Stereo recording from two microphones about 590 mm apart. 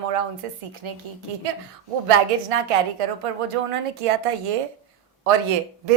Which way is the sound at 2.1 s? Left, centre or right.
Right.